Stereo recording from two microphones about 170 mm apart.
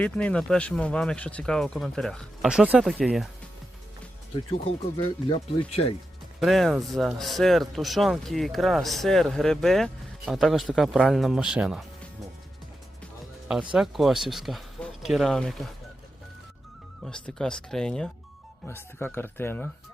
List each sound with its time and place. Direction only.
0.0 s speech: 5° left (ahead or behind)
4.5 s speech: 35° left (ahead or behind)
6.4 s speech: centre (ahead or behind)
13.7 s speech: centre (ahead or behind)
17.0 s speech: 5° left (ahead or behind)